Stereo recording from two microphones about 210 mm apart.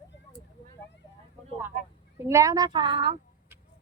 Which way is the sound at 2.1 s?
10° right (ahead or behind).